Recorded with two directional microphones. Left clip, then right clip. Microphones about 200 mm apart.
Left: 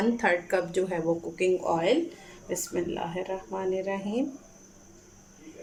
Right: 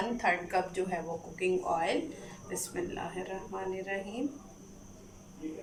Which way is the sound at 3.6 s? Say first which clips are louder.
Left 6 dB; 50° left (ahead or behind).